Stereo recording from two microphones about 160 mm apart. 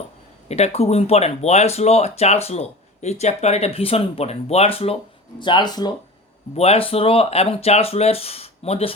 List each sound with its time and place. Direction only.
0.4 s speech: 40° left (ahead or behind); by 5.9 s 25° left (ahead or behind)
6.6 s speech: 40° left (ahead or behind)